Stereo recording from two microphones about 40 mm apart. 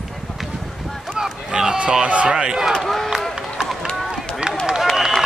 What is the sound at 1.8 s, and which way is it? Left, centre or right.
Speech, right.